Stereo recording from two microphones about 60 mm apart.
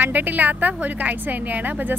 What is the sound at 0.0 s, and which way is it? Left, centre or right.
A woman's voice, right.